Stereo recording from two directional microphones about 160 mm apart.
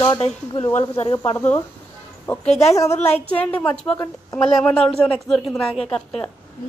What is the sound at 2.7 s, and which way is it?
A woman's voice, 20° left (ahead or behind).